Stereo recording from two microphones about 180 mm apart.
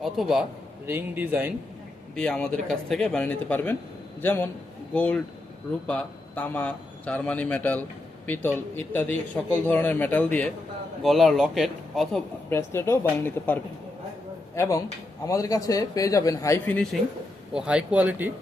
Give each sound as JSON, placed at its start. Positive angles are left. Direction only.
{"t": 0.0, "sound": "speech", "side_deg": 0}
{"t": 0.9, "sound": "speech", "side_deg": -10}
{"t": 2.1, "sound": "a man's voice", "side_deg": 5}
{"t": 12.5, "sound": "a man's voice", "side_deg": 15}
{"t": 17.5, "sound": "speech", "side_deg": -5}